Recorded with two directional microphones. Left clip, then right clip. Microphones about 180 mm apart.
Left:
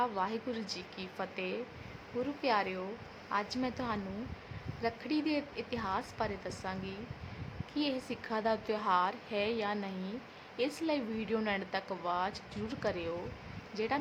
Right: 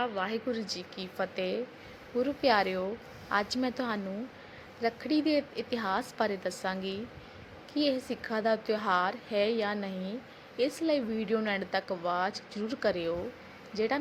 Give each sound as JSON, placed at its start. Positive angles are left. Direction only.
{"t": 0.0, "sound": "a woman's voice", "side_deg": -5}